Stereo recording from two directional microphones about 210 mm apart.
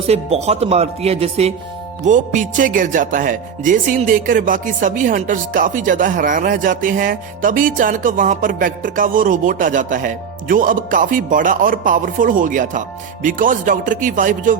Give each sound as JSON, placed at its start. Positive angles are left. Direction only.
{"t": 0.1, "sound": "speech", "side_deg": -30}